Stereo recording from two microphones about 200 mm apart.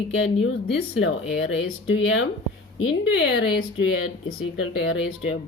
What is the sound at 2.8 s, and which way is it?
Speech, 60° left (ahead or behind).